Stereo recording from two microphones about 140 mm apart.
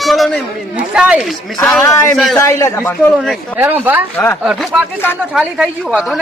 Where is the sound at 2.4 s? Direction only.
20° left (ahead or behind).